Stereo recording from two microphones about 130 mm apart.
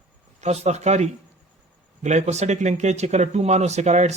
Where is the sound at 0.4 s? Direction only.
60° right (ahead or behind).